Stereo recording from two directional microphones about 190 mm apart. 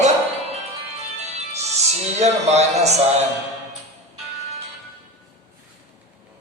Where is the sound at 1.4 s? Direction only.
35° right (ahead or behind).